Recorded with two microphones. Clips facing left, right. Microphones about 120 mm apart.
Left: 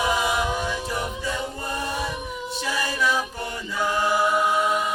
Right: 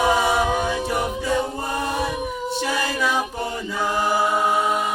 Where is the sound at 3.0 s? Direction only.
25° right (ahead or behind); by 4.3 s 40° right (ahead or behind).